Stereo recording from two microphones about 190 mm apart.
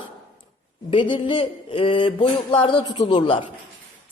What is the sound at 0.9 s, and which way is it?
A woman's voice, 25° left (ahead or behind).